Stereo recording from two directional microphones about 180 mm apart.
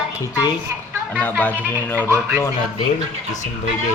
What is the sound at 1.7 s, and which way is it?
Speech, 10° left (ahead or behind).